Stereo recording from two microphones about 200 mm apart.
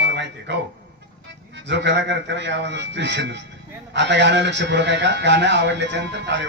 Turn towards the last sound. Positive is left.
turn(degrees=-60)  # may be behind; listen again after turning